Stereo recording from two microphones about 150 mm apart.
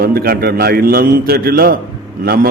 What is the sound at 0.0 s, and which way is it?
A man's voice, 85° right.